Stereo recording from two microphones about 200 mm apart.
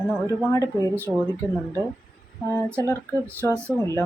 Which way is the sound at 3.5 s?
10° right (ahead or behind).